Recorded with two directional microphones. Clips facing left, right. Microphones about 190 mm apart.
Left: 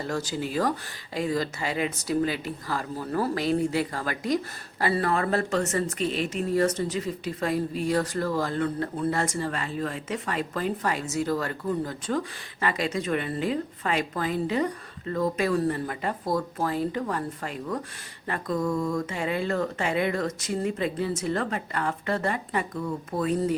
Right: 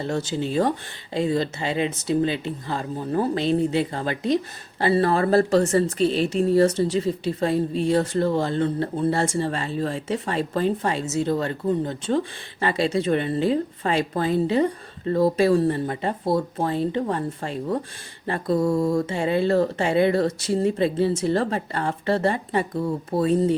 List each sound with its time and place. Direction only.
0.0 s speech: 25° right (ahead or behind)